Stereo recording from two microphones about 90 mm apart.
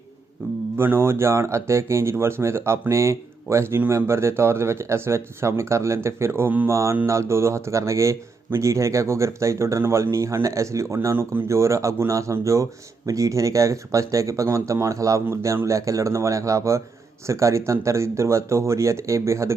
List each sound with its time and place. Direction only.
0.8 s speech: 25° right (ahead or behind)
6.7 s speech: 35° right (ahead or behind)